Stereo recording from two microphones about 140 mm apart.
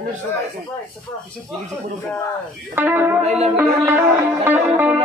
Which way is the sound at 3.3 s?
50° right (ahead or behind).